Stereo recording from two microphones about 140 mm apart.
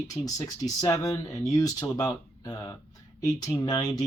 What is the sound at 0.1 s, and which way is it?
Speech, 25° left (ahead or behind).